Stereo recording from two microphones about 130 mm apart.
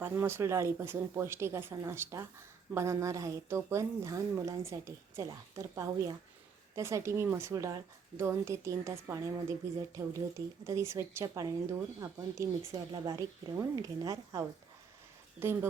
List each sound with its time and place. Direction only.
0.0 s a woman's voice: 20° right (ahead or behind)